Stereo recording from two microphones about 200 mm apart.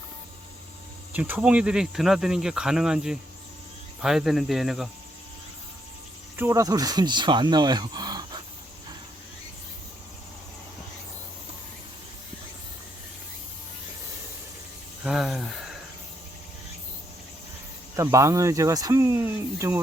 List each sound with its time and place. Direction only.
1.1 s cricket: 5° right (ahead or behind)
6.3 s speech: 15° right (ahead or behind)
15.0 s cricket: centre (ahead or behind)
17.9 s speech: 15° right (ahead or behind)